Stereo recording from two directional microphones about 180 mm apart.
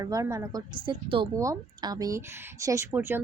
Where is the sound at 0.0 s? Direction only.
20° right (ahead or behind).